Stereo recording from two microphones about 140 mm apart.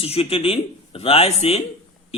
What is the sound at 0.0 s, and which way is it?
A man's voice, 45° left (ahead or behind).